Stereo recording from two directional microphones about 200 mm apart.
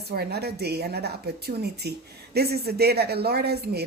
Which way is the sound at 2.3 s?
55° right (ahead or behind).